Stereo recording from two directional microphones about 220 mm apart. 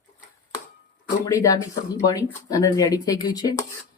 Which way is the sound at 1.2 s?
15° left (ahead or behind).